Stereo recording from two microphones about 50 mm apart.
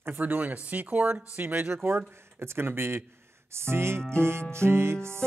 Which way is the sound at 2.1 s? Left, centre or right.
Right.